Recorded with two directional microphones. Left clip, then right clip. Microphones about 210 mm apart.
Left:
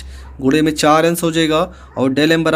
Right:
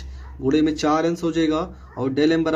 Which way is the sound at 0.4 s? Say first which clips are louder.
Left 7 dB; 30° left (ahead or behind).